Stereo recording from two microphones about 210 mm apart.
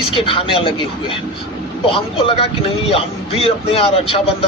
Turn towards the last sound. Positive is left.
turn(degrees=25)  # may be behind; listen again after turning